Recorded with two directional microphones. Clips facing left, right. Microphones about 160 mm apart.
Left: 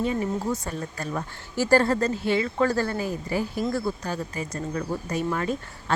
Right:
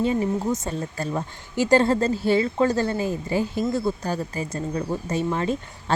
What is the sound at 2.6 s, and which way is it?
Speech, 20° right (ahead or behind).